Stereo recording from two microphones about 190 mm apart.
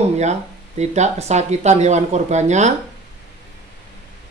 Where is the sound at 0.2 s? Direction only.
35° right (ahead or behind).